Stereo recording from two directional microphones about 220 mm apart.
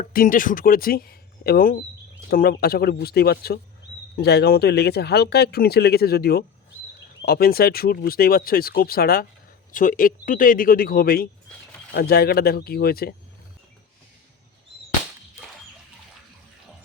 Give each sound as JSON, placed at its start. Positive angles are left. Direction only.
{"t": 0.0, "sound": "speech", "side_deg": 40}